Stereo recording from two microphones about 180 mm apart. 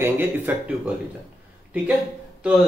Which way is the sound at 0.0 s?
10° right (ahead or behind).